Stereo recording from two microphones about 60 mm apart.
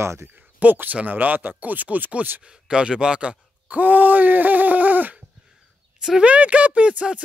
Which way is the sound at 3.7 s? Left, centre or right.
Right.